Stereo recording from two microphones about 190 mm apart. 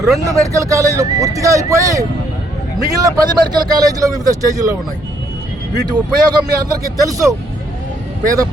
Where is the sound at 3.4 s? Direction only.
20° right (ahead or behind).